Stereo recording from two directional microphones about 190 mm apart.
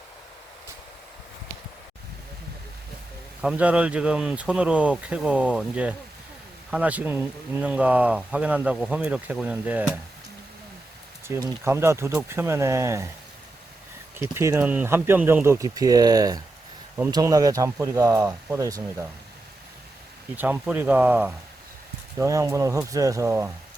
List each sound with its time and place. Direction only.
3.4 s speech: 5° right (ahead or behind)
11.3 s speech: 15° right (ahead or behind)
14.2 s speech: 15° right (ahead or behind)
20.3 s speech: 10° right (ahead or behind)